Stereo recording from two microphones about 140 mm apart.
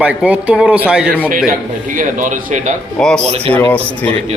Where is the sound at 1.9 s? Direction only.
65° right (ahead or behind).